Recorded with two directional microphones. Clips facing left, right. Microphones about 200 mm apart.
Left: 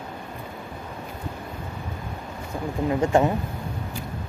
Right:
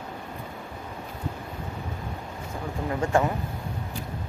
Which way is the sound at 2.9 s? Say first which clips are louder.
Left 4 dB; 20° left (ahead or behind).